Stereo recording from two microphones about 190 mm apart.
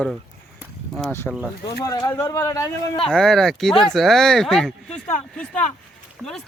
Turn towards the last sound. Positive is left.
turn(degrees=-5)  # may be behind; listen again after turning